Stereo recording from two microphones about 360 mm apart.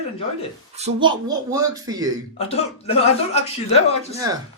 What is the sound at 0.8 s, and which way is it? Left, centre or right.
Speech, centre.